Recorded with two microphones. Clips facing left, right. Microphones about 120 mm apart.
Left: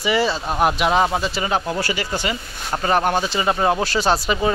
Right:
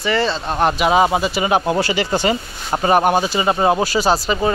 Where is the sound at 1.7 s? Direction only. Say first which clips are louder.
Right 5 dB; 25° right (ahead or behind).